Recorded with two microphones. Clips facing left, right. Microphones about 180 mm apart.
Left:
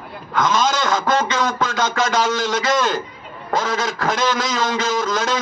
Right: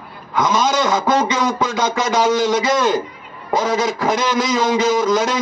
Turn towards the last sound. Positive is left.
turn(degrees=-15)  # may be behind; listen again after turning